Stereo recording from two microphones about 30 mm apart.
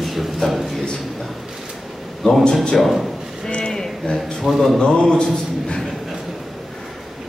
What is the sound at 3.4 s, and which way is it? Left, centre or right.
Speech, left.